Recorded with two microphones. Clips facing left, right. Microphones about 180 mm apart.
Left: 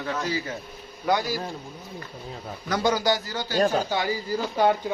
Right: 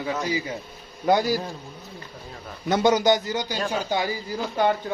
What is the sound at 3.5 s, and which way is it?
Speech, 40° left (ahead or behind).